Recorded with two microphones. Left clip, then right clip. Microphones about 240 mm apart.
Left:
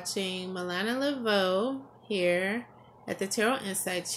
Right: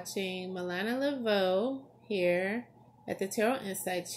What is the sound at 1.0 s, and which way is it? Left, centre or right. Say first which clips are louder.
Speech: left 2 dB; left.